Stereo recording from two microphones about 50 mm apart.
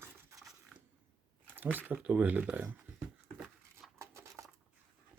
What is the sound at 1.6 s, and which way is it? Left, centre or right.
Speech, right.